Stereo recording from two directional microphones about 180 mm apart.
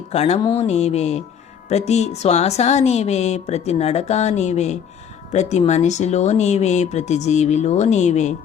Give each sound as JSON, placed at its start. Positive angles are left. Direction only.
{"t": 0.1, "sound": "a woman's voice", "side_deg": 35}